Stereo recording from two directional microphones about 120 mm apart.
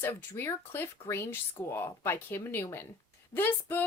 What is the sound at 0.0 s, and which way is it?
Speech, 20° left (ahead or behind).